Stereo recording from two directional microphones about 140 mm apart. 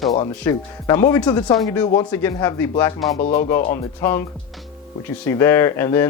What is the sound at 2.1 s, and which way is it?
Speech, 15° left (ahead or behind).